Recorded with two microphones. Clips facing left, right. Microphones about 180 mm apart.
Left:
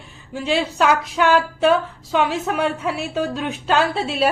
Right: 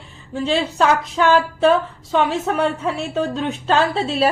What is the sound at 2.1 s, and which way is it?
A woman's voice, 5° left (ahead or behind).